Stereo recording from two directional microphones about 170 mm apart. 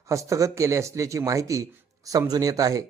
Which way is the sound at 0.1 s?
20° right (ahead or behind).